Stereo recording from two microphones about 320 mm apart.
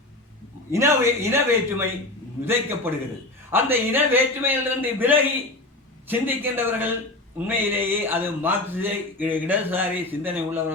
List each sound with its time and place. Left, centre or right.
0.7 s a man's voice: centre
2.4 s a man's voice: centre